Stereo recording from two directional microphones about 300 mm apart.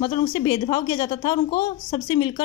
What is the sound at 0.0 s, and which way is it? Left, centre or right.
A woman's voice, centre.